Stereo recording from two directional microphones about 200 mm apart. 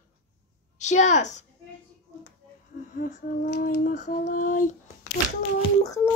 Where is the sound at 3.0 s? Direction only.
45° left (ahead or behind).